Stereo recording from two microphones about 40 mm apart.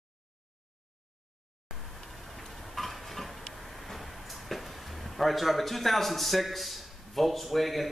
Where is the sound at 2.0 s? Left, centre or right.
Centre.